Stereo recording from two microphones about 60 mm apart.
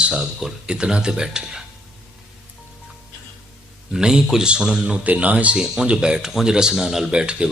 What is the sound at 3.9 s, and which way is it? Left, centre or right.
Speech, centre.